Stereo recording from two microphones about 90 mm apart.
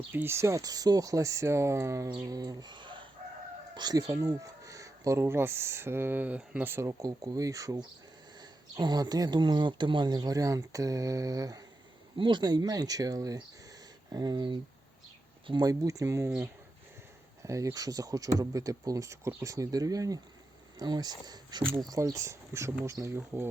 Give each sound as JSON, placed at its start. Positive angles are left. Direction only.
{"t": 0.1, "sound": "speech", "side_deg": -25}
{"t": 2.2, "sound": "speech", "side_deg": -45}
{"t": 3.8, "sound": "speech", "side_deg": -45}
{"t": 6.7, "sound": "speech", "side_deg": -35}
{"t": 8.4, "sound": "speech", "side_deg": -50}
{"t": 12.1, "sound": "speech", "side_deg": -60}
{"t": 15.6, "sound": "speech", "side_deg": -40}
{"t": 17.4, "sound": "speech", "side_deg": -35}